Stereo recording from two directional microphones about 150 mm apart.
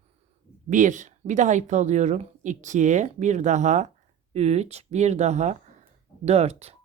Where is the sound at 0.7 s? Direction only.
55° right (ahead or behind).